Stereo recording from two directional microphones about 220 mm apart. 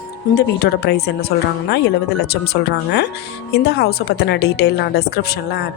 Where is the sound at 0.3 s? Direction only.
45° left (ahead or behind).